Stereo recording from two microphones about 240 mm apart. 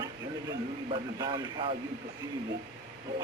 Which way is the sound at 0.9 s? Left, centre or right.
Centre.